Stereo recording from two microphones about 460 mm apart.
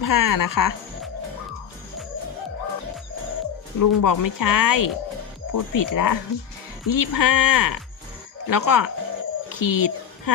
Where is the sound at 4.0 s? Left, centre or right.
Left.